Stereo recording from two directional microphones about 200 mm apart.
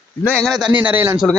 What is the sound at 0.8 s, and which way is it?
Speech, 10° right (ahead or behind).